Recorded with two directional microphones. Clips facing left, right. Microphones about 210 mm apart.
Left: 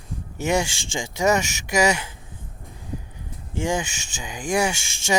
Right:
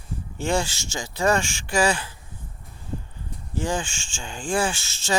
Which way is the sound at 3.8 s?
15° left (ahead or behind).